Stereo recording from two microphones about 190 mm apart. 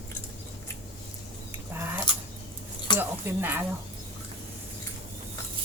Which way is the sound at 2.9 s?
10° right (ahead or behind).